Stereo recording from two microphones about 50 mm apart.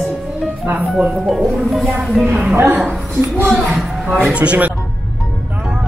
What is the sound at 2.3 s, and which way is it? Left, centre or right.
Speech, right.